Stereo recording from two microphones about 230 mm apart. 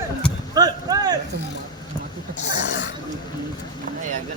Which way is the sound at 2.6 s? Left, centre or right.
Left.